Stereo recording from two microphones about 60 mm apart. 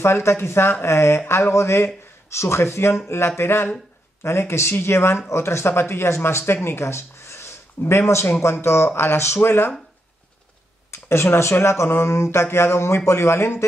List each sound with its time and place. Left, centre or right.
0.0 s speech: left
10.9 s speech: left